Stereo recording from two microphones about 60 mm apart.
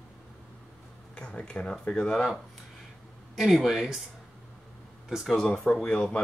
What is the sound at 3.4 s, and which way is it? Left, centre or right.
Speech, centre.